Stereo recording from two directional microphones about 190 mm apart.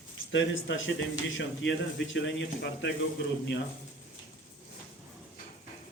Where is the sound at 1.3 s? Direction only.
70° left (ahead or behind).